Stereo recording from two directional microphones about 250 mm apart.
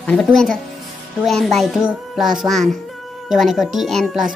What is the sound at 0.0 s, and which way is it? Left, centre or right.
A child's voice, centre.